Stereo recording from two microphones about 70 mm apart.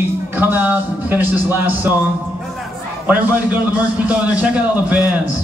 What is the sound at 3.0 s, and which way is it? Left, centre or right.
A man's voice, right.